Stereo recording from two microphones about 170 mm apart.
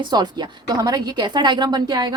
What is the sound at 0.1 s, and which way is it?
Speech, 25° right (ahead or behind).